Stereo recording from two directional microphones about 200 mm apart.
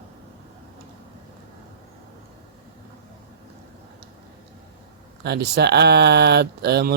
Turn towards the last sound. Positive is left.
turn(degrees=-55)  # may be behind; listen again after turning